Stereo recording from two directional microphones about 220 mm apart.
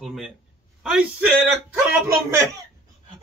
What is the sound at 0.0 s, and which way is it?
Speech, centre (ahead or behind).